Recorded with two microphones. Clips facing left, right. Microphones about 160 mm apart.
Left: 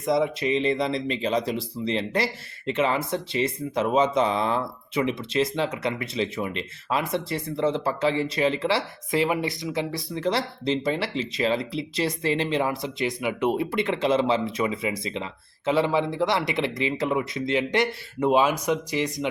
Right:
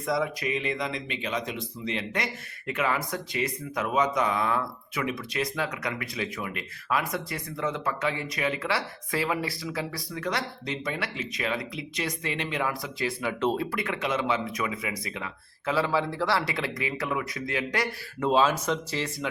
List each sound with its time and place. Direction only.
0.0 s speech: 25° left (ahead or behind)